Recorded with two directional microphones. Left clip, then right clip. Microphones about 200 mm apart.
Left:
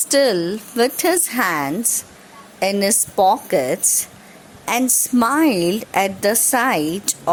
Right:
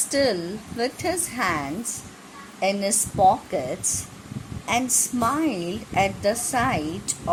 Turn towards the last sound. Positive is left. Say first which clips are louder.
# left 7 dB
turn(degrees=50)  # may be behind; listen again after turning